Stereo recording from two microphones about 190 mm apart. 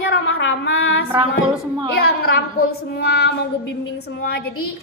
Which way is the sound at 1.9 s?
55° left (ahead or behind).